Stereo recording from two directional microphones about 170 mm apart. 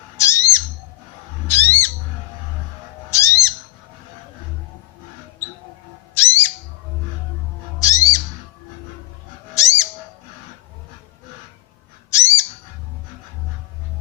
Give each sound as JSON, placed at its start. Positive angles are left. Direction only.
{"t": 0.2, "sound": "bird", "side_deg": 15}
{"t": 1.5, "sound": "squawk", "side_deg": 10}
{"t": 3.1, "sound": "bird", "side_deg": 15}
{"t": 6.1, "sound": "bird", "side_deg": 15}
{"t": 7.8, "sound": "bird", "side_deg": 20}
{"t": 9.6, "sound": "owl", "side_deg": 15}
{"t": 12.1, "sound": "bird", "side_deg": 15}